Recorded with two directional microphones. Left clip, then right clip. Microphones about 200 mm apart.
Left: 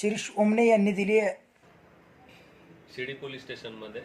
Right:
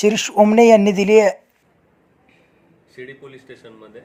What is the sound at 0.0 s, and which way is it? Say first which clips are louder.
Speech: right 13 dB; 40° right (ahead or behind).